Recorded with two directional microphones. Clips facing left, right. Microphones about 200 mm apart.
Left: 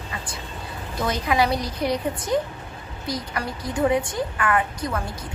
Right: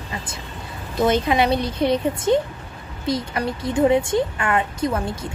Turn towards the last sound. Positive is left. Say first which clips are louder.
# right 5 dB
turn(degrees=-25)  # may be behind; listen again after turning